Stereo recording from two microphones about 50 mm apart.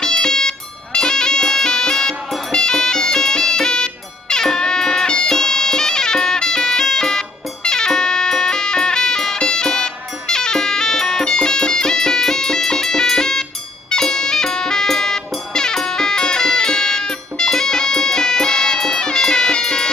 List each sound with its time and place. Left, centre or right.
0.0 s music: centre